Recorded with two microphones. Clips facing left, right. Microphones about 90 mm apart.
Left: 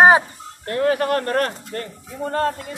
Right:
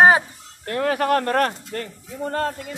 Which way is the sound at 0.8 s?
90° right.